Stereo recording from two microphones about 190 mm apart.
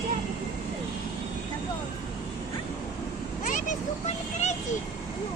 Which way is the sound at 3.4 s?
40° left (ahead or behind).